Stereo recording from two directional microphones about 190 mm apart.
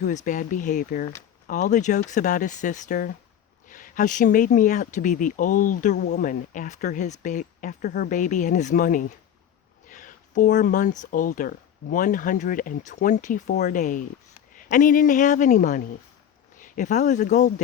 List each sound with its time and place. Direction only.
0.3 s speech: 45° left (ahead or behind)